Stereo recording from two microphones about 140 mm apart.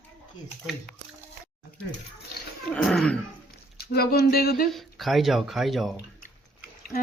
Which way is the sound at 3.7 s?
90° left.